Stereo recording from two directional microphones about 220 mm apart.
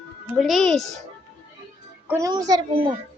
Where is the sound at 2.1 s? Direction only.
15° right (ahead or behind).